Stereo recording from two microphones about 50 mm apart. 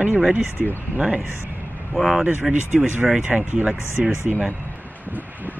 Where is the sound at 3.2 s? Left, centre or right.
Right.